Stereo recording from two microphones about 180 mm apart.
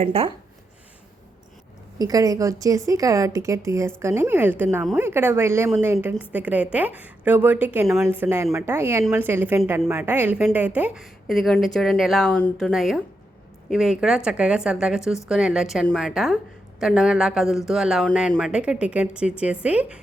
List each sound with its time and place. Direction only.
0.0 s speech: 30° right (ahead or behind)
2.0 s a woman's voice: 20° right (ahead or behind)